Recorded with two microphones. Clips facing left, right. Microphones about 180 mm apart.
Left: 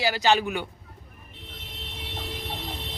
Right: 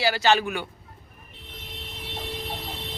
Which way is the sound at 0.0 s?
15° left (ahead or behind).